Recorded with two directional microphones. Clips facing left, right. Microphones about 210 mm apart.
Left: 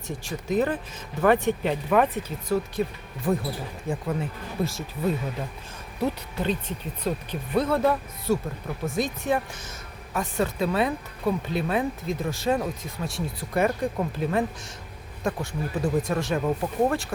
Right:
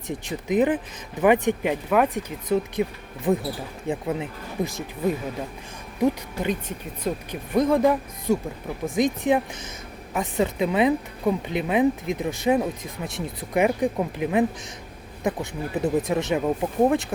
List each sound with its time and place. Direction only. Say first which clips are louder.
0.3 s speech: right 3 dB; 15° right (ahead or behind)